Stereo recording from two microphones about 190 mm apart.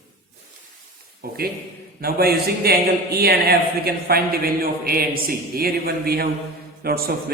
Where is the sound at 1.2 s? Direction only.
55° right (ahead or behind).